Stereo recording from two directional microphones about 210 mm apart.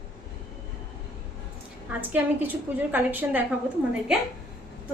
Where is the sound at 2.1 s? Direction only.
10° right (ahead or behind).